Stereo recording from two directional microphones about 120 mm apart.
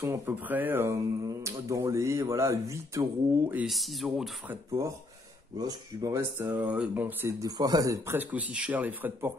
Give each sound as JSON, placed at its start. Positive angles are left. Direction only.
{"t": 0.0, "sound": "speech", "side_deg": -25}
{"t": 3.6, "sound": "speech", "side_deg": 0}
{"t": 4.5, "sound": "speech", "side_deg": -25}
{"t": 6.4, "sound": "speech", "side_deg": -15}
{"t": 8.2, "sound": "speech", "side_deg": -15}